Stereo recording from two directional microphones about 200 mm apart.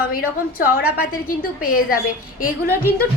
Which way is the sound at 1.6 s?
45° left (ahead or behind).